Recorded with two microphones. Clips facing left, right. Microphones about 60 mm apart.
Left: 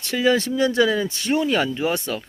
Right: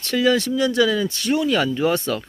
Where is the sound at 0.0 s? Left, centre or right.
Centre.